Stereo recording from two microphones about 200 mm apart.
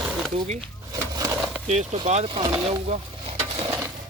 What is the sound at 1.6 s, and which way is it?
Speech, 35° right (ahead or behind).